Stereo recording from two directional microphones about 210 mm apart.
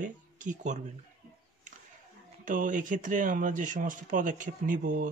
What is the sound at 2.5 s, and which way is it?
Speech, 40° right (ahead or behind).